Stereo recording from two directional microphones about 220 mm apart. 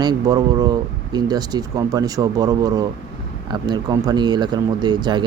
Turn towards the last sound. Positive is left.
turn(degrees=-20)  # may be behind; listen again after turning